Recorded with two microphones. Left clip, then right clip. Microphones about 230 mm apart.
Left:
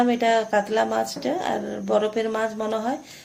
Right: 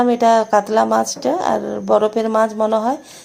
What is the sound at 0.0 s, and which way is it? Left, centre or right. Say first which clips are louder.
Speech: right 7 dB; right.